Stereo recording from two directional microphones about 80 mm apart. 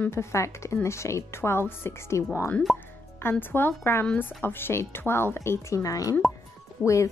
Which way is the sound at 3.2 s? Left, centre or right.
Left.